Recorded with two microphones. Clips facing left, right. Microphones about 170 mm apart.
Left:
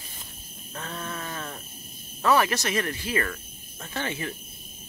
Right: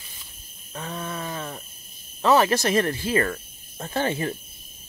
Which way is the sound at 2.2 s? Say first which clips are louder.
Right 4 dB; 25° right (ahead or behind).